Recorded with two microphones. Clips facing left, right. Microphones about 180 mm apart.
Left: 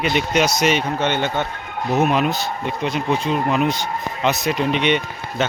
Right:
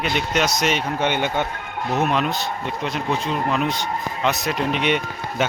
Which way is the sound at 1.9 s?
5° left (ahead or behind).